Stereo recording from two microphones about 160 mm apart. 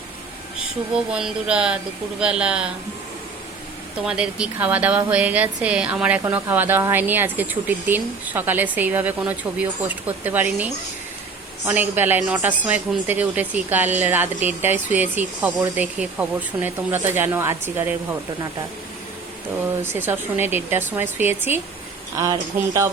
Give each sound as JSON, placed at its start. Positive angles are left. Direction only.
{"t": 0.9, "sound": "speech", "side_deg": -5}
{"t": 4.0, "sound": "a woman's voice", "side_deg": -5}
{"t": 19.8, "sound": "a woman's voice", "side_deg": -15}